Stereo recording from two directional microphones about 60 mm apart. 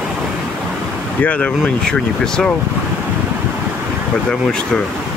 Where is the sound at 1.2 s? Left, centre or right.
Left.